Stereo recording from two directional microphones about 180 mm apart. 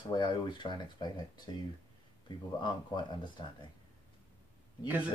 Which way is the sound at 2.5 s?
25° left (ahead or behind).